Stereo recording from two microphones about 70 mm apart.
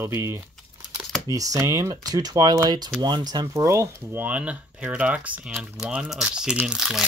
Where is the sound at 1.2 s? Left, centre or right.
Right.